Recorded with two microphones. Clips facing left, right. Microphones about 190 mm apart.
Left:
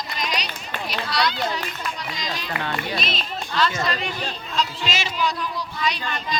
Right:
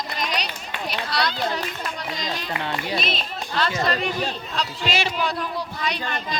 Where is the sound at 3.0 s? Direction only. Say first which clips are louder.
Right 1 dB; 55° right (ahead or behind).